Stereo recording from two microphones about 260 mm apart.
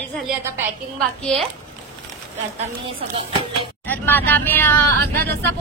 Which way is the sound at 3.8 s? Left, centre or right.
Centre.